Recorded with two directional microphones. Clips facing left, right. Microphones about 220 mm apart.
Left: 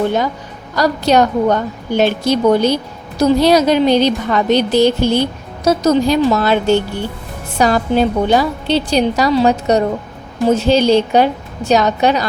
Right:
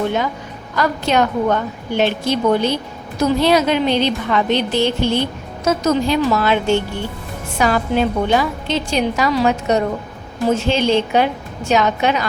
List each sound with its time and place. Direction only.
0.8 s a woman's voice: 40° left (ahead or behind)